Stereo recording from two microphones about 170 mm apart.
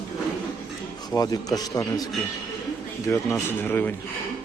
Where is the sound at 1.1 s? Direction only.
20° left (ahead or behind).